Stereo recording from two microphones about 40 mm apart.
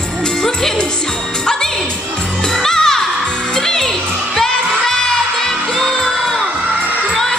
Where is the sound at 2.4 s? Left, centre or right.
Centre.